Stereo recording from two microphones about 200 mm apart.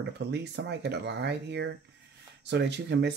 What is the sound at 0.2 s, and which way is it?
Speech, 55° right (ahead or behind).